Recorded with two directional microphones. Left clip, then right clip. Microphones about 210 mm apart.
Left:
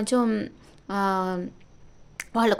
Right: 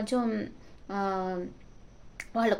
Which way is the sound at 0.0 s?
40° left (ahead or behind).